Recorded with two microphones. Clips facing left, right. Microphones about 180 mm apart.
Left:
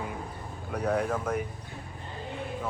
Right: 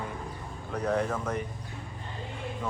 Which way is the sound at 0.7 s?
10° left (ahead or behind).